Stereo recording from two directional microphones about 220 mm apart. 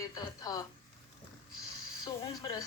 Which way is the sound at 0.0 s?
15° left (ahead or behind).